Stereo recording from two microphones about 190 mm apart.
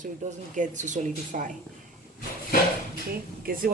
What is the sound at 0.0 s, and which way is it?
Speech, 40° right (ahead or behind).